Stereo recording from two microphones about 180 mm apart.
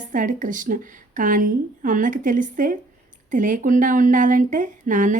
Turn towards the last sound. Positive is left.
turn(degrees=-45)  # may be behind; listen again after turning